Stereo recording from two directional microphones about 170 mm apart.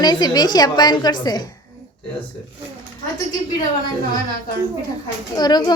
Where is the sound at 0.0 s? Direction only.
25° left (ahead or behind).